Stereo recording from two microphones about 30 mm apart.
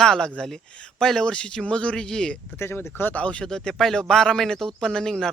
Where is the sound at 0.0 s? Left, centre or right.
Left.